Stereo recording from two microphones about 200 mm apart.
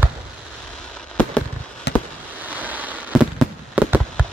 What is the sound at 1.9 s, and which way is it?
Fireworks, 55° left (ahead or behind).